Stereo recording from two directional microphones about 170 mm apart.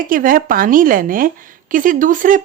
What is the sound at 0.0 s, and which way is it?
Speech, 55° right (ahead or behind).